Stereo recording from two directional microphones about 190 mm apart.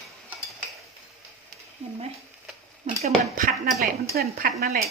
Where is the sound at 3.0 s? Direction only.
45° right (ahead or behind).